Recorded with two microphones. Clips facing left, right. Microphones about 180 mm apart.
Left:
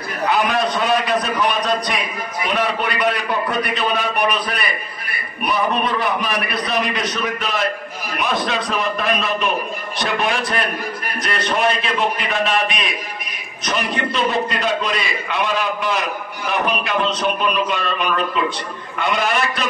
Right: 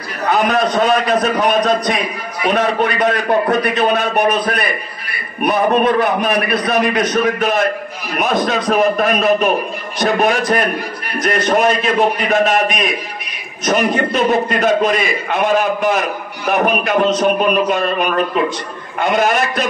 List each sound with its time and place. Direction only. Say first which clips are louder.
0.3 s a man's voice: right 4 dB; 45° right (ahead or behind)